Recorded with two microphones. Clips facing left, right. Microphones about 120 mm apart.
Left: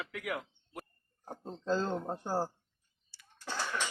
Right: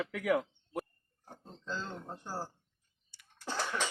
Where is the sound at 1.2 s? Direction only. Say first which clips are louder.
Left 10 dB; 45° left (ahead or behind).